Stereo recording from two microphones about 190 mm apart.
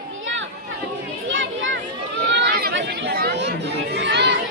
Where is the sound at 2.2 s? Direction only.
60° right (ahead or behind).